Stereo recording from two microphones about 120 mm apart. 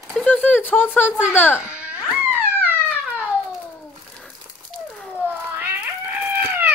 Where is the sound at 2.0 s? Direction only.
15° right (ahead or behind).